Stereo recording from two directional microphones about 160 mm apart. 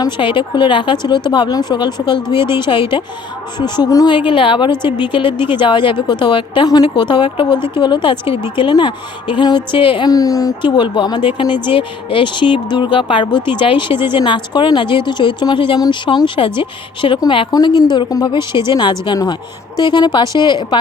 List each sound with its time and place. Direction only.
0.0 s speech: 30° left (ahead or behind)
4.7 s speech: 15° right (ahead or behind)
4.9 s speech: 30° left (ahead or behind)